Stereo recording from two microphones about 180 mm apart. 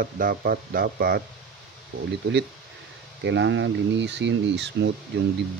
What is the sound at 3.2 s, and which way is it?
Speech, 85° right.